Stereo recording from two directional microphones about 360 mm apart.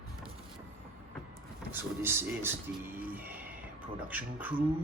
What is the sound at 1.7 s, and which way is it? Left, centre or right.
Speech, centre.